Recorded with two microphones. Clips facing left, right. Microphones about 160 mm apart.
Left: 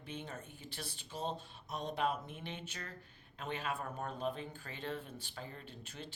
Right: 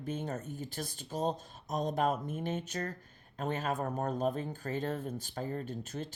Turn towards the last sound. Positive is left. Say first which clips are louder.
# right 10 dB
turn(degrees=-45)  # may be behind; listen again after turning